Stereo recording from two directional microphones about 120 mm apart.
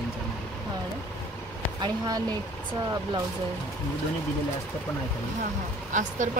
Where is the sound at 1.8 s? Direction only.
35° right (ahead or behind).